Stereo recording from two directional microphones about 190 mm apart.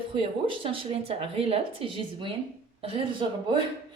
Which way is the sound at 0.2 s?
30° right (ahead or behind).